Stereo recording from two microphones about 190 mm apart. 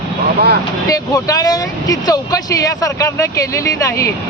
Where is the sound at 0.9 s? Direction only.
20° left (ahead or behind).